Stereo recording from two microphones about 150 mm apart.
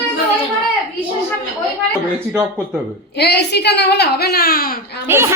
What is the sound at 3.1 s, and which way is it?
A woman's voice, 90° left.